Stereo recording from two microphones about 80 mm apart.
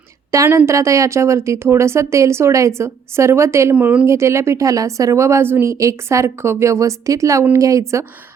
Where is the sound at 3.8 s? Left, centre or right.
Right.